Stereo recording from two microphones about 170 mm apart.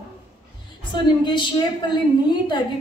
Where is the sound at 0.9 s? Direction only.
25° left (ahead or behind).